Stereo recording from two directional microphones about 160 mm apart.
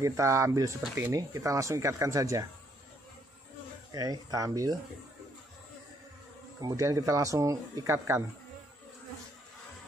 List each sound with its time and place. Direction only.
0.0 s speech: 20° right (ahead or behind)
3.9 s speech: 25° right (ahead or behind)
6.6 s speech: 20° right (ahead or behind)